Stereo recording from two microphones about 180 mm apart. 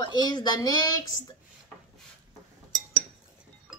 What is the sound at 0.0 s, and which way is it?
Speech, 20° left (ahead or behind).